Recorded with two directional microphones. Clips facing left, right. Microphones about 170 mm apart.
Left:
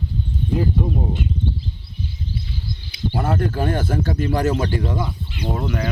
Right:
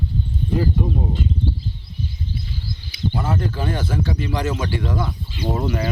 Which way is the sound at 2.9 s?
60° left (ahead or behind).